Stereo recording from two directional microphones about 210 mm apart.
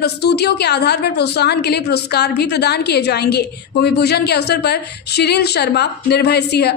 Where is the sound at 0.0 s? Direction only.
50° left (ahead or behind).